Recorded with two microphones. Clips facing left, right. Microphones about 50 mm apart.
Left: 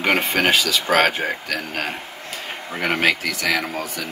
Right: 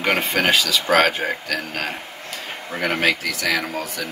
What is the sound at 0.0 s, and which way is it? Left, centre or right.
Speech, centre.